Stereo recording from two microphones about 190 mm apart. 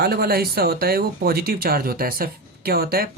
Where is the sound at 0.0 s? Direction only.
55° right (ahead or behind).